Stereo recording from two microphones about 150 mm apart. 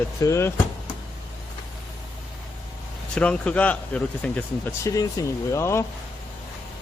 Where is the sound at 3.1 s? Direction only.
5° left (ahead or behind).